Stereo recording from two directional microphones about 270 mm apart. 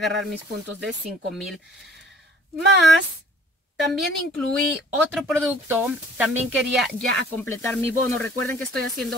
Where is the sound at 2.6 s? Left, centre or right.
Right.